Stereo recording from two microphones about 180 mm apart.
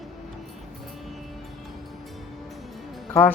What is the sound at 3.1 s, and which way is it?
Speech, 10° left (ahead or behind).